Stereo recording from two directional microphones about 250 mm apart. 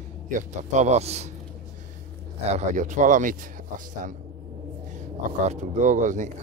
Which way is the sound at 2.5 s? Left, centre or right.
Right.